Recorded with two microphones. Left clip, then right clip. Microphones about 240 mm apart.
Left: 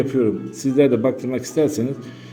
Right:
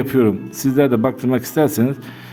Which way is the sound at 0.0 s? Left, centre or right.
Right.